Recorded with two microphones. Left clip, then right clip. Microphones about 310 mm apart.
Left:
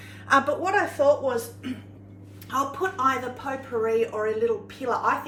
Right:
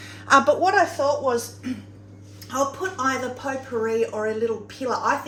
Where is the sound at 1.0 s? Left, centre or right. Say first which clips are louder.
Left 2 dB; centre.